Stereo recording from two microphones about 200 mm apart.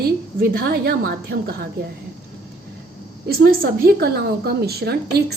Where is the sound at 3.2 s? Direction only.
50° right (ahead or behind).